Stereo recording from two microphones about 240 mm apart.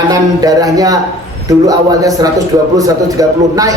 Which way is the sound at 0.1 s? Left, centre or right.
Centre.